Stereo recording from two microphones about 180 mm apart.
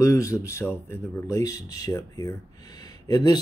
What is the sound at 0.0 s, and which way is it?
Speech, 15° left (ahead or behind).